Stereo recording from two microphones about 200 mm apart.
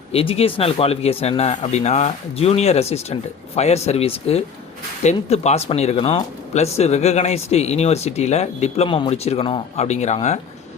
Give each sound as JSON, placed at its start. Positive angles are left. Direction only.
{"t": 0.1, "sound": "speech", "side_deg": 30}